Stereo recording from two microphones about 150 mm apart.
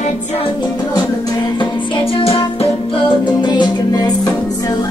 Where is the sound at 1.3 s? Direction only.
30° left (ahead or behind).